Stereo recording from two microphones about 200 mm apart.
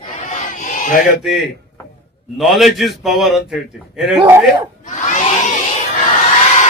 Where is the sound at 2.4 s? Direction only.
Centre (ahead or behind).